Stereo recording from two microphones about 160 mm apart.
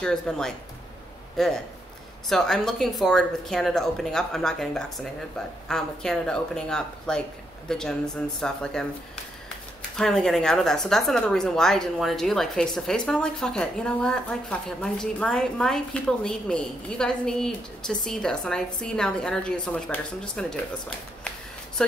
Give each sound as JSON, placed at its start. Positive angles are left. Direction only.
{"t": 0.0, "sound": "a man's voice", "side_deg": 5}
{"t": 9.9, "sound": "speech", "side_deg": 5}